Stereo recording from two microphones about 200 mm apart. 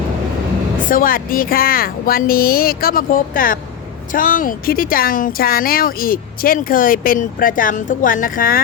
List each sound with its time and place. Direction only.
0.9 s speech: 45° left (ahead or behind)